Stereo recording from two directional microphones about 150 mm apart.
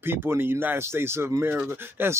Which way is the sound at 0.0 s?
15° right (ahead or behind).